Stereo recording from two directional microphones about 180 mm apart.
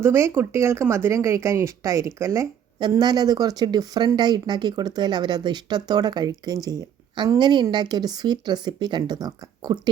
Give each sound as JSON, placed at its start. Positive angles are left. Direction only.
{"t": 0.0, "sound": "speech", "side_deg": -15}